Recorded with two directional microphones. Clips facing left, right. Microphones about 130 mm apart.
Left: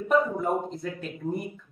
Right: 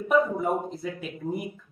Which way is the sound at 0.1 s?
Centre (ahead or behind).